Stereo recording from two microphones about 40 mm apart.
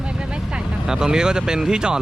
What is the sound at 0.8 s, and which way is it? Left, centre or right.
Speech, centre.